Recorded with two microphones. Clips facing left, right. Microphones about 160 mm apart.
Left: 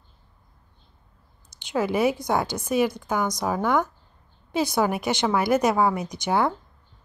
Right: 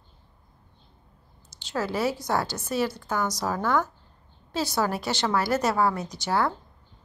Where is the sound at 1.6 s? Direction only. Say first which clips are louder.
Left 4 dB; 15° left (ahead or behind).